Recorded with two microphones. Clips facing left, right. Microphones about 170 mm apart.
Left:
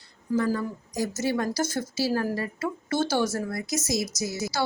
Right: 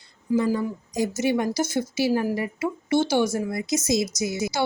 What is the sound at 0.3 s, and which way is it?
A woman's voice, 15° right (ahead or behind).